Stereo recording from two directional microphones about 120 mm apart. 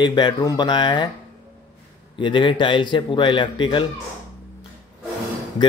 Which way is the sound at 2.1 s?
40° left (ahead or behind).